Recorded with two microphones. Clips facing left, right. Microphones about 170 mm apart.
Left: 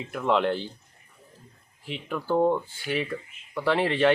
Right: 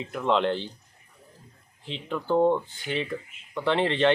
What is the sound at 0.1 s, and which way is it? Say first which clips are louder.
Speech: even; 20° right (ahead or behind).